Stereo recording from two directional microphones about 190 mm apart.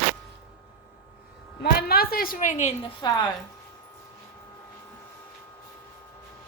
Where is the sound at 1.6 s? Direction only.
55° left (ahead or behind); by 2.7 s 40° left (ahead or behind).